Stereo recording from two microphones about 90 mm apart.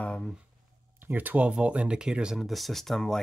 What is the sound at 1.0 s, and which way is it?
Speech, 20° right (ahead or behind).